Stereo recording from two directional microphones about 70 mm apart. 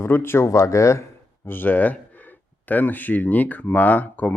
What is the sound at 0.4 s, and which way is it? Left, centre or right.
Speech, left.